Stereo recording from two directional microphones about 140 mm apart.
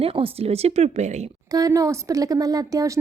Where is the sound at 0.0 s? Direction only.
40° right (ahead or behind).